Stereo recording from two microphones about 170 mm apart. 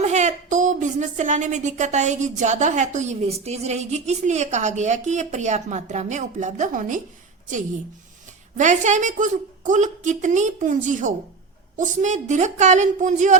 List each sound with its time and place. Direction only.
0.0 s a woman's voice: 45° right (ahead or behind)
8.5 s a woman's voice: 45° right (ahead or behind)